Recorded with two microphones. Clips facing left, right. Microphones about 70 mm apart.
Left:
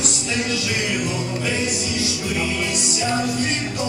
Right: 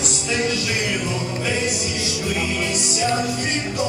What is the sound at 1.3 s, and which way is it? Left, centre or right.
Music, centre.